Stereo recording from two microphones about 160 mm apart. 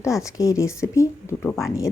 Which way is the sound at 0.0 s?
20° left (ahead or behind).